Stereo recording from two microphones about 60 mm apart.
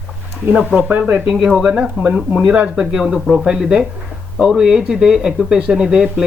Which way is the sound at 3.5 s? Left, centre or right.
Centre.